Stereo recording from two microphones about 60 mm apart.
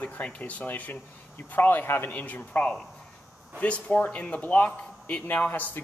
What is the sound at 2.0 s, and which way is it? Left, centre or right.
Speech, left.